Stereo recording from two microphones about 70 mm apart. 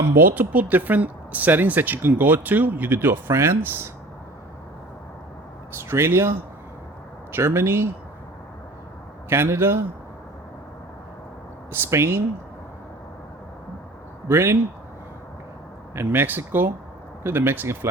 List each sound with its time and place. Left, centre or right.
0.2 s speech: right
5.9 s speech: right
7.3 s speech: right
9.3 s speech: right
11.7 s speech: right
14.3 s speech: right
16.0 s speech: right